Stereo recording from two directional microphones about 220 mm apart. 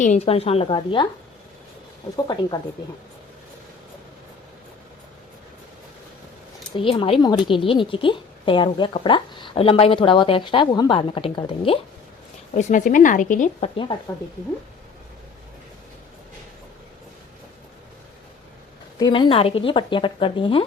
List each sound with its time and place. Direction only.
0.0 s speech: 30° left (ahead or behind)
2.1 s speech: 20° left (ahead or behind)
6.7 s speech: 25° left (ahead or behind)
18.9 s speech: 20° left (ahead or behind)